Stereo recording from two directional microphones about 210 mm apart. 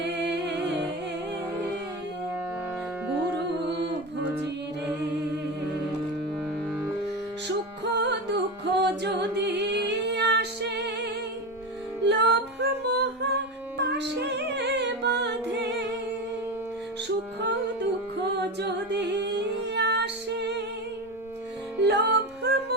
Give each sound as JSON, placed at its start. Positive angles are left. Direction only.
{"t": 0.0, "sound": "music", "side_deg": -55}
{"t": 7.9, "sound": "music", "side_deg": -55}
{"t": 18.2, "sound": "music", "side_deg": -55}
{"t": 19.7, "sound": "female singing", "side_deg": -55}
{"t": 21.8, "sound": "music", "side_deg": -55}